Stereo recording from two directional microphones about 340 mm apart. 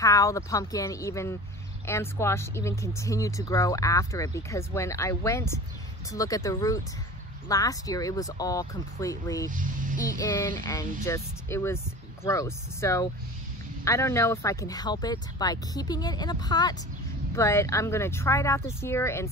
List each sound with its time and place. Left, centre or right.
0.0 s speech: centre
9.5 s speech: right
10.0 s speech: centre